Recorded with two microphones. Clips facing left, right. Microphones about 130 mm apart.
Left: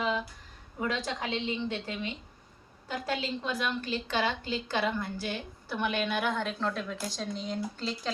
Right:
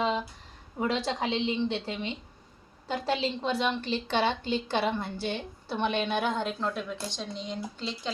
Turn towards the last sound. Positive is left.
turn(degrees=5)  # may be behind; listen again after turning